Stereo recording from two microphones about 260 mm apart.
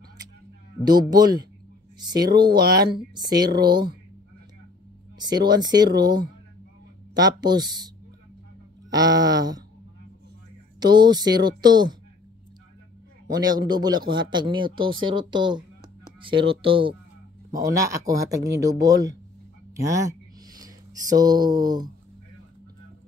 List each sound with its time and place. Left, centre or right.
1.1 s speech: centre
5.2 s speech: centre
8.9 s speech: centre
10.8 s speech: centre
13.3 s speech: centre
19.7 s a sound: centre